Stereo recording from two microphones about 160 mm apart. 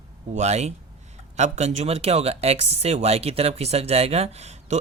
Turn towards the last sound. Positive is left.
turn(degrees=-45)  # may be behind; listen again after turning